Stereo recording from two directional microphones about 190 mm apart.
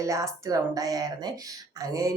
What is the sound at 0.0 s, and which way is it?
A woman's voice, 15° right (ahead or behind).